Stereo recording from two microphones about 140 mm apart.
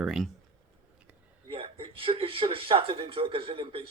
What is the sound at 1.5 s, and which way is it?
Speech, 40° right (ahead or behind).